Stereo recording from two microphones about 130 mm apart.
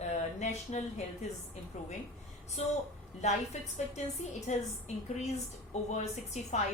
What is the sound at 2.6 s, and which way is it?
A woman's voice, 60° left (ahead or behind).